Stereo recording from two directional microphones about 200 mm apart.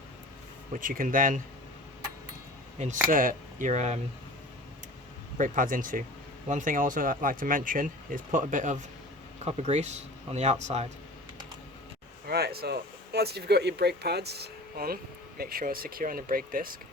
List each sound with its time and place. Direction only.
0.7 s speech: 40° right (ahead or behind)
2.7 s speech: 35° right (ahead or behind)
5.4 s speech: 40° right (ahead or behind)
12.3 s speech: 50° right (ahead or behind)